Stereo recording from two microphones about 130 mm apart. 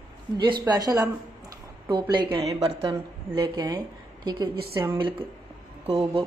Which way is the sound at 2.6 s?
55° right (ahead or behind).